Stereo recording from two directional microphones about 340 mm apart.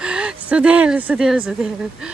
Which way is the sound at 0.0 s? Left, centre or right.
Centre.